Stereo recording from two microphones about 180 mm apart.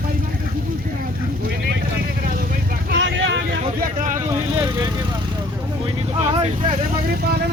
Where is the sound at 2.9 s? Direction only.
90° right.